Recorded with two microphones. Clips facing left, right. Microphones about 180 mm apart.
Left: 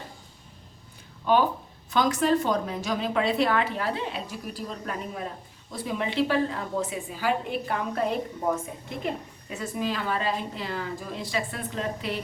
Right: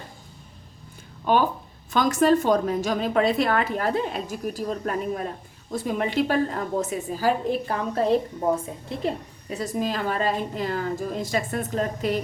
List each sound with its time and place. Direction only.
1.9 s a woman's voice: 45° right (ahead or behind)